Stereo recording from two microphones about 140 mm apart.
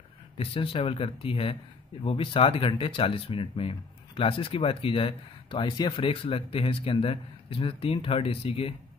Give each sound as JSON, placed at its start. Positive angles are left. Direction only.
{"t": 0.4, "sound": "speech", "side_deg": 40}